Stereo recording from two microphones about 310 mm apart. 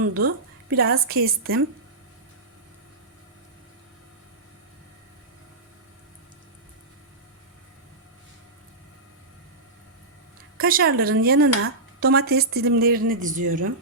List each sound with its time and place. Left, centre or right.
0.7 s speech: right
10.6 s a woman's voice: right
11.3 s speech: right
11.9 s speech: right